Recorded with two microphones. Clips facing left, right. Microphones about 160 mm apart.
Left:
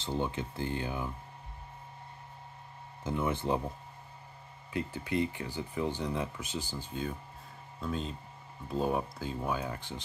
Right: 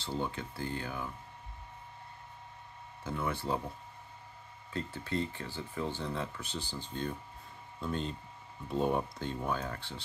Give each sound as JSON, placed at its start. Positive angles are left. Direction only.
{"t": 0.0, "sound": "speech", "side_deg": 20}
{"t": 3.0, "sound": "speech", "side_deg": 20}
{"t": 4.7, "sound": "speech", "side_deg": 15}